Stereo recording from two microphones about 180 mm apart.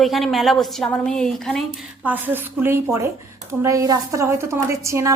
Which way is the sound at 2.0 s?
10° right (ahead or behind).